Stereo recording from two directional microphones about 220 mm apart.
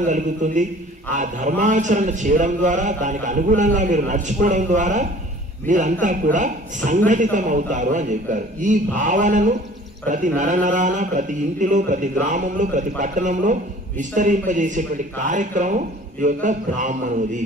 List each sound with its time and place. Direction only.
0.0 s a man's voice: 35° right (ahead or behind)